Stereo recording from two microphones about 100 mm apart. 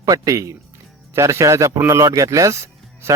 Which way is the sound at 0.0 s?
35° right (ahead or behind).